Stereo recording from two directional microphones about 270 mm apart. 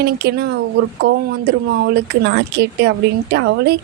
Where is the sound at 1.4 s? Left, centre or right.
Right.